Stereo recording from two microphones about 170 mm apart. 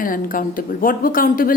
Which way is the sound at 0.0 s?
55° left (ahead or behind).